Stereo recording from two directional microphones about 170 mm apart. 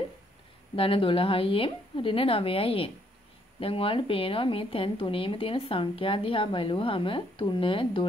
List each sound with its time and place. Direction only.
0.7 s a woman's voice: 30° left (ahead or behind)